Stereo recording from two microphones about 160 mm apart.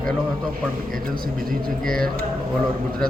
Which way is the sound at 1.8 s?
5° left (ahead or behind).